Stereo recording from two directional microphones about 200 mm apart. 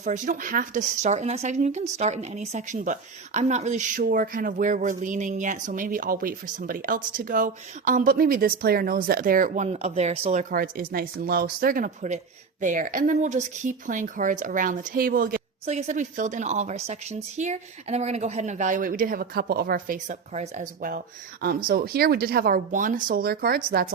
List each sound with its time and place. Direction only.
0.0 s speech: 40° right (ahead or behind)
10.5 s speech: 45° right (ahead or behind)
15.6 s speech: 35° right (ahead or behind)